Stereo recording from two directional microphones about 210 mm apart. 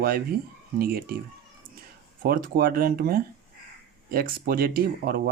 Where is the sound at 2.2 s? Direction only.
40° right (ahead or behind).